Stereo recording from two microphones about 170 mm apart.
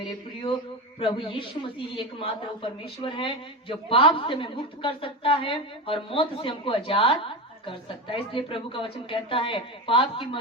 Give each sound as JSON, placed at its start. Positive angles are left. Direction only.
{"t": 0.9, "sound": "a woman's voice", "side_deg": 30}